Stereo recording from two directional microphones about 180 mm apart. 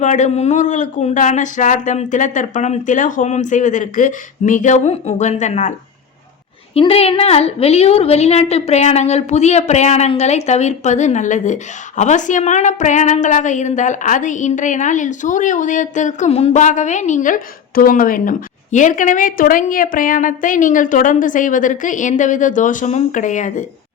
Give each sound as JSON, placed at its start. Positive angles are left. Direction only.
{"t": 0.0, "sound": "a woman's voice", "side_deg": 40}
{"t": 6.7, "sound": "a woman's voice", "side_deg": 35}